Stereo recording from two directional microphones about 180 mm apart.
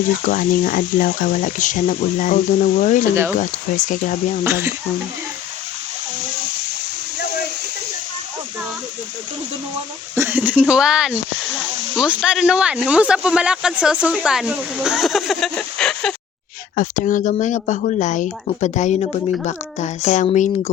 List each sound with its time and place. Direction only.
0.3 s speech: 50° left (ahead or behind)
4.4 s speech: 15° right (ahead or behind)
10.2 s speech: 10° right (ahead or behind)
16.7 s speech: 45° left (ahead or behind)